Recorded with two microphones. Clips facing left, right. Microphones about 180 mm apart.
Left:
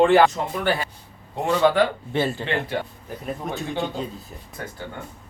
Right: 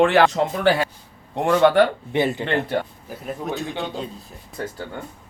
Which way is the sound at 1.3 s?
60° right (ahead or behind).